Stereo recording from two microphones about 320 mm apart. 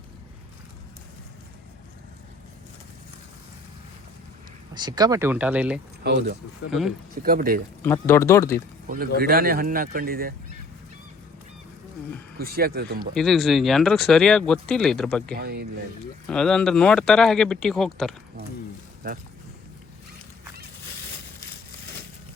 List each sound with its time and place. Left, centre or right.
4.7 s speech: centre
6.0 s speech: right
6.7 s speech: centre
7.2 s speech: right
7.8 s speech: centre
9.1 s speech: right
12.4 s speech: right
13.1 s speech: centre
15.4 s speech: right
16.2 s speech: centre
19.0 s speech: right